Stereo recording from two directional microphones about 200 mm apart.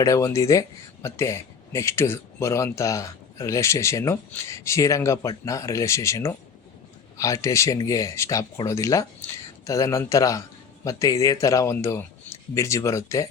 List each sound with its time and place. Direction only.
0.0 s a man's voice: 15° left (ahead or behind)